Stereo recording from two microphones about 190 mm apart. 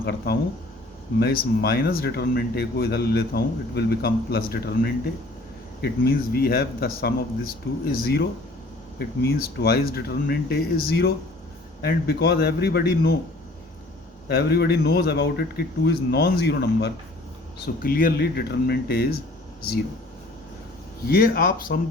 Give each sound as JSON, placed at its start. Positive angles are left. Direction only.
{"t": 0.0, "sound": "speech", "side_deg": 55}
{"t": 14.3, "sound": "speech", "side_deg": 55}
{"t": 17.8, "sound": "speech", "side_deg": 50}
{"t": 21.1, "sound": "speech", "side_deg": 50}